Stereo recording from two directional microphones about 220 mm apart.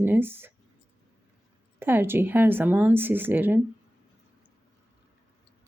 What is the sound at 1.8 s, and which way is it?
Speech, 10° right (ahead or behind).